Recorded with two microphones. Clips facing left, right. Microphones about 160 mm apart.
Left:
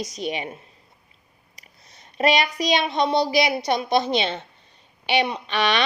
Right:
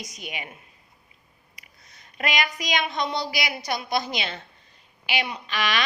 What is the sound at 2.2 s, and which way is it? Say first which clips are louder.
A woman's voice: left 7 dB; 30° left (ahead or behind).